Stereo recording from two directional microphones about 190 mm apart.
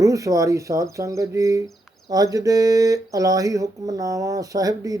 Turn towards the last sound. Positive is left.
turn(degrees=-20)  # may be behind; listen again after turning